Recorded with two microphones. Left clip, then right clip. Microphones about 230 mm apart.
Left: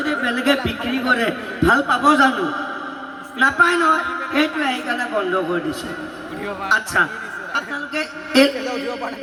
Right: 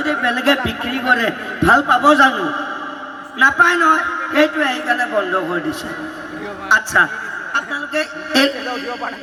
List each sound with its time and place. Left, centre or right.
0.0 s a man's voice: right
6.7 s a man's voice: right